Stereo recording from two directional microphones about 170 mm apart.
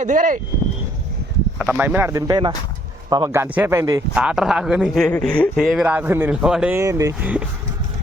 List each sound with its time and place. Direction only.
0.0 s speech: 50° right (ahead or behind)
1.5 s speech: 10° right (ahead or behind)
4.1 s a man's voice: 5° right (ahead or behind)